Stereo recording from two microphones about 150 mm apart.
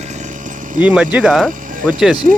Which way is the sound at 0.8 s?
10° right (ahead or behind).